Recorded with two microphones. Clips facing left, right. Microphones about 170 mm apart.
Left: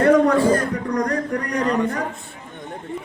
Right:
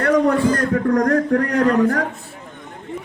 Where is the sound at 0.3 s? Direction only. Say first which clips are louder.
Left 1 dB; 35° left (ahead or behind).